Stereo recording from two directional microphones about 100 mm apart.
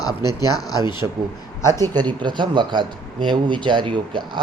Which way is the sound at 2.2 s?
50° right (ahead or behind).